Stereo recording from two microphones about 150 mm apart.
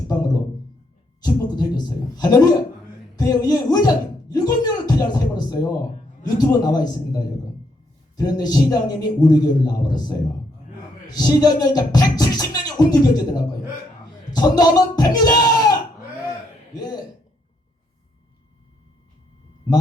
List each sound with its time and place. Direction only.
1.2 s a man's voice: 25° left (ahead or behind)
11.1 s beatboxing: 25° left (ahead or behind)
14.0 s a sound: 25° left (ahead or behind)
16.7 s throat clearing: 25° left (ahead or behind)